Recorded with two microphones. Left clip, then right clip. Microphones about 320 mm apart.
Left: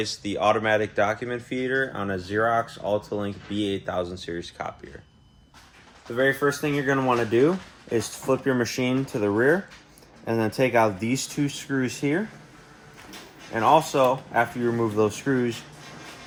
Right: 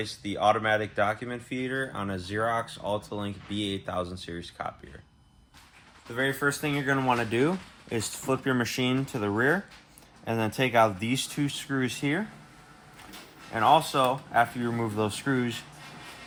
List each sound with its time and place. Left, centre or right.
0.0 s speech: right
6.1 s speech: right
13.5 s speech: centre